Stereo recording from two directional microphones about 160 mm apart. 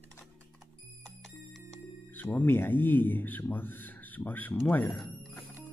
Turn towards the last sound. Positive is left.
turn(degrees=10)  # may be behind; listen again after turning